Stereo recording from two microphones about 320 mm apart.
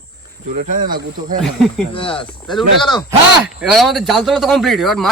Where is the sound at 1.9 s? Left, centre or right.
Centre.